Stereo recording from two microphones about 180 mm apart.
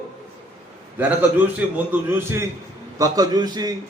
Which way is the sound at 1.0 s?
10° right (ahead or behind).